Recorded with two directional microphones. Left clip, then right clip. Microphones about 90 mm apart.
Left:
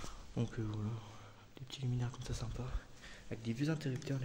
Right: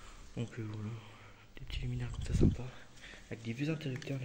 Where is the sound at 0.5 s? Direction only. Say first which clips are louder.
Left 1 dB; 25° left (ahead or behind).